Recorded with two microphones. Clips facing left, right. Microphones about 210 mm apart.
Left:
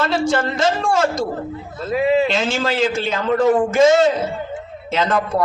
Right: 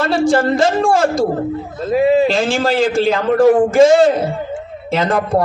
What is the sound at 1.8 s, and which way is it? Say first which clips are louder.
A man's voice: right 4 dB; 35° right (ahead or behind).